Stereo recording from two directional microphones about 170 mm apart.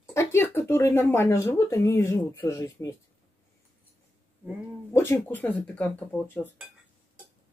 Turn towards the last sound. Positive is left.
turn(degrees=10)  # may be behind; listen again after turning